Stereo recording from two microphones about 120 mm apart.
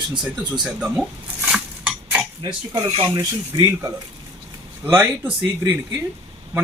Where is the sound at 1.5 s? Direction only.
10° right (ahead or behind).